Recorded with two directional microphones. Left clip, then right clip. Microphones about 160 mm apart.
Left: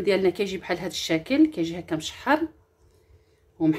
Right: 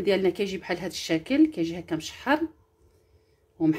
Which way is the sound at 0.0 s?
5° right (ahead or behind).